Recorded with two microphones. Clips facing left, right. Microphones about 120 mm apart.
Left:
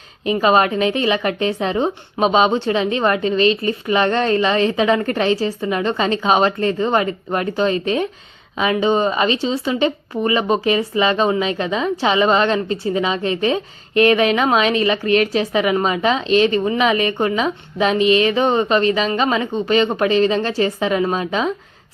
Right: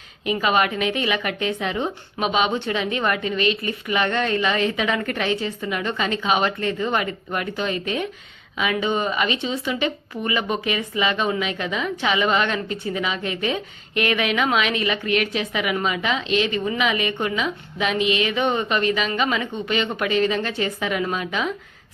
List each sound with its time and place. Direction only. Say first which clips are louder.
0.3 s speech: left 5 dB; 30° left (ahead or behind)